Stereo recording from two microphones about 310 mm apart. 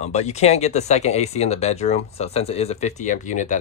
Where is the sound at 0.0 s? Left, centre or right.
Left.